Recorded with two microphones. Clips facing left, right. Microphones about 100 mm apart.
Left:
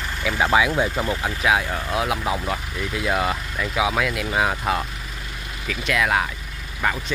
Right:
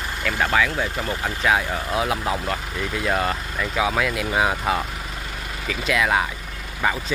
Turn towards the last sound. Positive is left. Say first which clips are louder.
# right 1 dB
turn(degrees=0)  # may be behind; listen again after turning